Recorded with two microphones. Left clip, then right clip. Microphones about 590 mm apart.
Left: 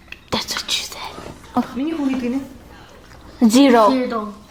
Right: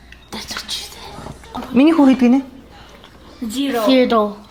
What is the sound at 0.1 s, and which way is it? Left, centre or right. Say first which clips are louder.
Whispering: left 5 dB; left.